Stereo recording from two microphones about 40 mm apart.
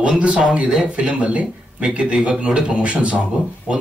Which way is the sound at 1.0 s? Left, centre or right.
Right.